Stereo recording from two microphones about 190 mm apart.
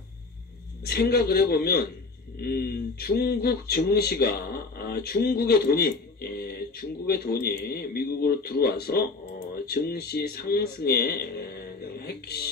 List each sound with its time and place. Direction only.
0.8 s speech: 55° left (ahead or behind)